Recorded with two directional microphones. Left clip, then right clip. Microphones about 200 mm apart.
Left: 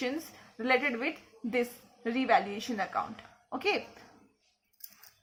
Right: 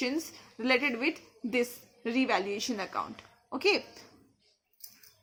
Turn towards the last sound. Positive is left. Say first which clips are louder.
# right 3 dB
turn(degrees=-30)  # may be behind; listen again after turning